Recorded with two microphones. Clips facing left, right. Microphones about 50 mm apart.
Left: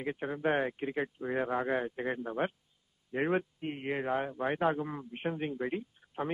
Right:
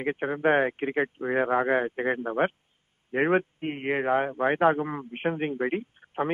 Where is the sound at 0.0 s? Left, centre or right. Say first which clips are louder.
Right 7 dB; right.